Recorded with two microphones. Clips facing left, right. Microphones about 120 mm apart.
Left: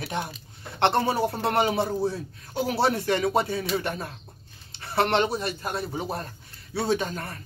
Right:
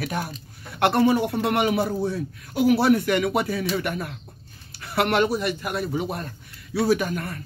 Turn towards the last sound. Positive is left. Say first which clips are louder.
# right 4 dB
turn(degrees=25)  # may be behind; listen again after turning